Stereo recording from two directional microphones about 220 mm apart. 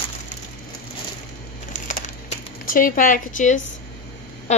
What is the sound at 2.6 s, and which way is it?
Speech, 40° left (ahead or behind).